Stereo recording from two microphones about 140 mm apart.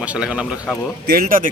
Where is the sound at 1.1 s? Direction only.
85° right.